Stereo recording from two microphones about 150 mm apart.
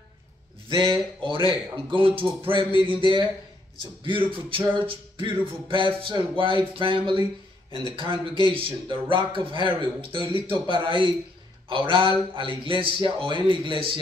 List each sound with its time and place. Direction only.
0.7 s a man's voice: 30° right (ahead or behind)